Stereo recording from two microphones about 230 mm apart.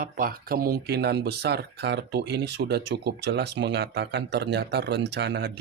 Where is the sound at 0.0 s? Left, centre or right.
Right.